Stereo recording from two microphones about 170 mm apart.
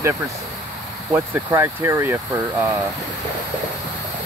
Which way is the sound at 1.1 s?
15° right (ahead or behind).